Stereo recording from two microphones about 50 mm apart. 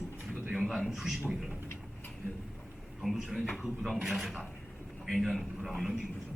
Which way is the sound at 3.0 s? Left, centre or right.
Centre.